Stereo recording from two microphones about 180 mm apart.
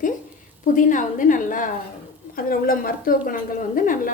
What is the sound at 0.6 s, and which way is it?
A woman's voice, 45° left (ahead or behind).